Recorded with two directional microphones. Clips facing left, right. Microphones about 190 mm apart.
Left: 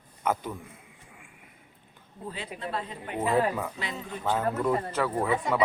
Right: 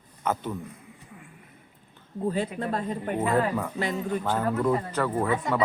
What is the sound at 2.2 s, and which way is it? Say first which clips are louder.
Speech: right 9 dB; 45° right (ahead or behind).